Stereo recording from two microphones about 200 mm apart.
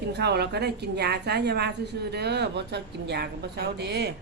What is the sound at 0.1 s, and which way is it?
A woman's voice, 55° right (ahead or behind).